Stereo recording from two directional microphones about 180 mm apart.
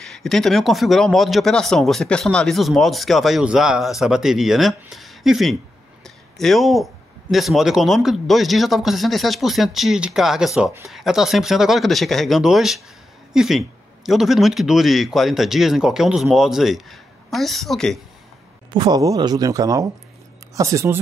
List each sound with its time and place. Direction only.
0.0 s speech: centre (ahead or behind)
18.7 s speech: 25° right (ahead or behind)